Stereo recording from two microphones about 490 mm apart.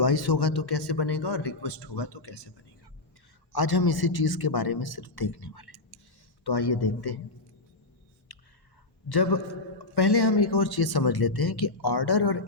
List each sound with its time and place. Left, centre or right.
0.0 s a man's voice: left
3.5 s a man's voice: left
8.3 s a sound: left
9.0 s a man's voice: left